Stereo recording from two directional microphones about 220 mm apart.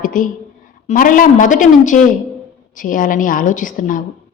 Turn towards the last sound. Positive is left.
turn(degrees=35)  # may be behind; listen again after turning